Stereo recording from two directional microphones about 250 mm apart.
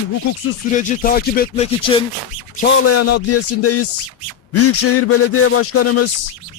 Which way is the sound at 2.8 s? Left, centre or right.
Left.